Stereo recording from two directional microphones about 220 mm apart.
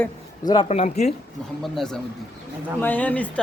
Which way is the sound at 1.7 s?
5° left (ahead or behind).